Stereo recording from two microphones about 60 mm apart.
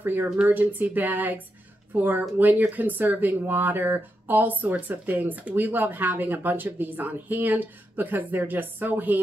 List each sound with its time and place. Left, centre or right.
0.0 s speech: right